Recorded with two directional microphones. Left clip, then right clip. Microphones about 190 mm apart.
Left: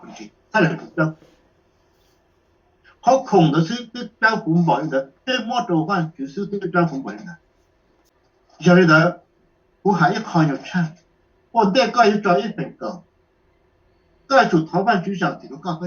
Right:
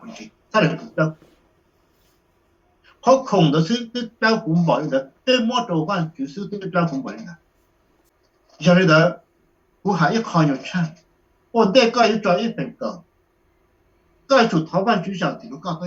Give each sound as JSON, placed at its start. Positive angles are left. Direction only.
{"t": 0.1, "sound": "speech", "side_deg": -55}
{"t": 2.8, "sound": "speech", "side_deg": -55}
{"t": 8.5, "sound": "speech", "side_deg": -55}
{"t": 14.3, "sound": "speech", "side_deg": -55}